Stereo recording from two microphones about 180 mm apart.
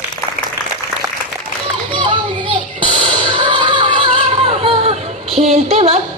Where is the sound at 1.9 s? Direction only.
25° right (ahead or behind).